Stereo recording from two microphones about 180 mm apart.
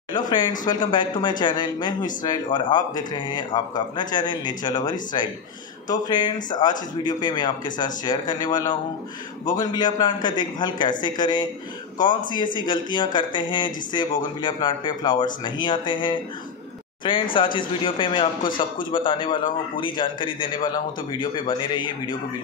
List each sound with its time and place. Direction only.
0.3 s speech: 25° left (ahead or behind)